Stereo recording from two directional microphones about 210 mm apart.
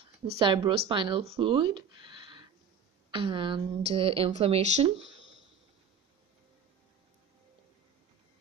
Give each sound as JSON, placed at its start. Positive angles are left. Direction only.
{"t": 0.4, "sound": "speech", "side_deg": -25}